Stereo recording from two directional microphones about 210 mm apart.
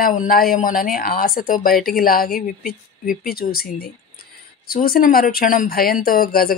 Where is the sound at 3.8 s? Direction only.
45° left (ahead or behind).